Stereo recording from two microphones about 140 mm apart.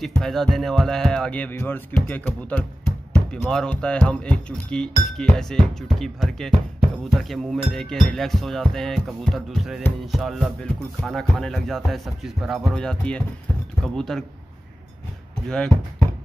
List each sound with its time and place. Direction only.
0.2 s music: 5° left (ahead or behind)
3.4 s speech: 5° left (ahead or behind)
7.2 s music: centre (ahead or behind)
15.4 s music: 5° left (ahead or behind)